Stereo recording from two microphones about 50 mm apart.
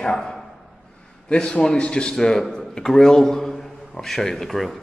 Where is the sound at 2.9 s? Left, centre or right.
Centre.